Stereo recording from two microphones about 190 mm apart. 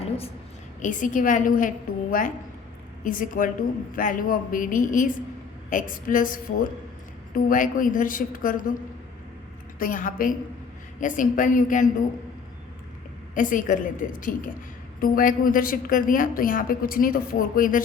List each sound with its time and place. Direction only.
0.8 s a woman's voice: 40° left (ahead or behind)
9.7 s a woman's voice: 45° left (ahead or behind)
13.3 s a woman's voice: 45° left (ahead or behind)